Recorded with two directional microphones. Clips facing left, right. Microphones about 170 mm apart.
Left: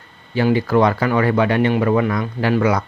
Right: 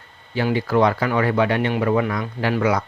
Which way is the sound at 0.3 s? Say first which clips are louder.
Left 3 dB; 45° left (ahead or behind).